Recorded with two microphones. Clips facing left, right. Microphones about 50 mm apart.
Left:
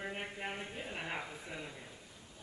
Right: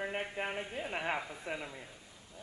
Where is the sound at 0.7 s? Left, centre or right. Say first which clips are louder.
Right 6 dB; right.